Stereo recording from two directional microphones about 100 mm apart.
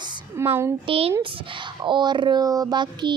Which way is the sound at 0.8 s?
75° right (ahead or behind).